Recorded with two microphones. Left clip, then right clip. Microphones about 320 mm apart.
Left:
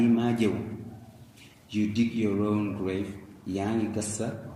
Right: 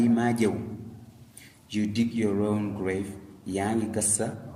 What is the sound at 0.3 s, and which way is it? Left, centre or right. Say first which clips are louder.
Speech: right 1 dB; right.